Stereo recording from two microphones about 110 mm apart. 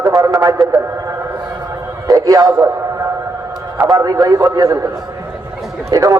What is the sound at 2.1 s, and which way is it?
Speech, 30° right (ahead or behind).